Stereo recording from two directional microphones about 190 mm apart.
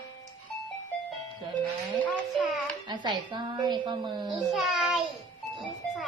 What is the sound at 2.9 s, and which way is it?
A woman's voice, 25° right (ahead or behind).